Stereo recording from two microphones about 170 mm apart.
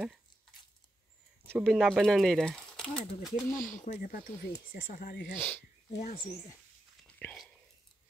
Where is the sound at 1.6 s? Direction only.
Centre (ahead or behind).